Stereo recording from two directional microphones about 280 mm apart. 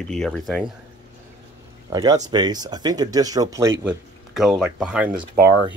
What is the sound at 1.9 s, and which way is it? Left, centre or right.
Speech, centre.